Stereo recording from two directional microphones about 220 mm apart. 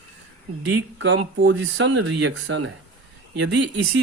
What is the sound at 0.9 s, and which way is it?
Speech, 60° right (ahead or behind).